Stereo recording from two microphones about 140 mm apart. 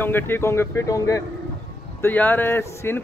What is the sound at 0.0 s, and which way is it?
Speech, 15° left (ahead or behind).